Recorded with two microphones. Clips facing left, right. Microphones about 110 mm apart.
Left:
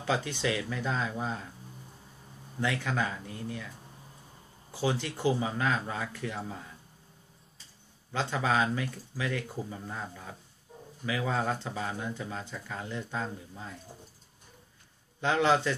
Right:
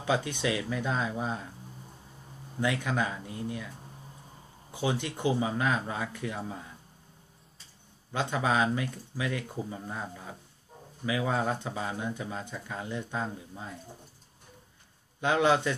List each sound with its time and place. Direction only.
0.0 s speech: 15° right (ahead or behind)
2.6 s speech: 15° right (ahead or behind)
4.7 s speech: 20° right (ahead or behind)
8.1 s speech: 15° right (ahead or behind)
15.1 s speech: 15° right (ahead or behind)